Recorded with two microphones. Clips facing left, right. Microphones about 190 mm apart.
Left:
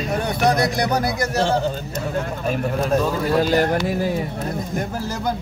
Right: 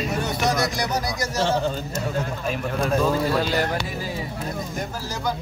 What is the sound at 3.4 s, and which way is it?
Speech, 45° left (ahead or behind).